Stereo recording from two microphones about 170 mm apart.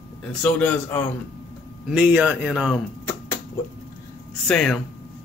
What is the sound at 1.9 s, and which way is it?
Speech, 5° right (ahead or behind).